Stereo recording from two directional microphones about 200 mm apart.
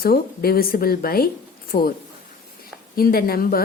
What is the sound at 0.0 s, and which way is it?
A woman's voice, 50° left (ahead or behind).